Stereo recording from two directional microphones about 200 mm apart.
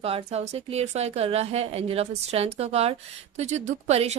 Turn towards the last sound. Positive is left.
turn(degrees=-30)  # may be behind; listen again after turning